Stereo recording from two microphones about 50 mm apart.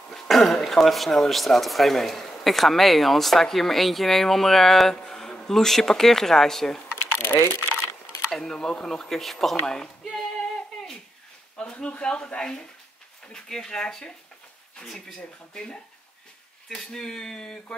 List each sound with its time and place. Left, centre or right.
0.1 s speech: centre
7.2 s speech: left
8.3 s speech: centre
9.1 s a sound: centre
11.5 s speech: left